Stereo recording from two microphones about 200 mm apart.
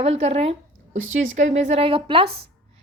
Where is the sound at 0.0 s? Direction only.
30° right (ahead or behind).